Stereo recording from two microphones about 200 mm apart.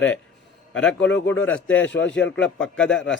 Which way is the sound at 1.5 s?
80° left.